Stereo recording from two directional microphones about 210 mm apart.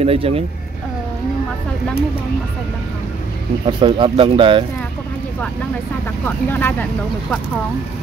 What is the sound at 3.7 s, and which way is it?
Speech, 20° right (ahead or behind).